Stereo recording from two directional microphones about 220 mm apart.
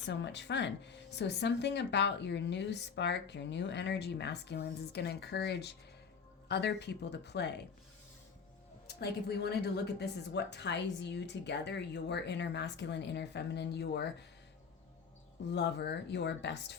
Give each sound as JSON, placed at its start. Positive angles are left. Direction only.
{"t": 0.0, "sound": "speech", "side_deg": 55}
{"t": 9.0, "sound": "speech", "side_deg": 50}
{"t": 15.4, "sound": "speech", "side_deg": 50}